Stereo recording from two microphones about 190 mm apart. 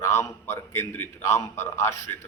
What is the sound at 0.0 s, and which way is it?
A man's voice, 15° left (ahead or behind).